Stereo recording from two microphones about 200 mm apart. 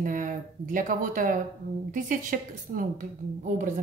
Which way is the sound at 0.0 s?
40° right (ahead or behind).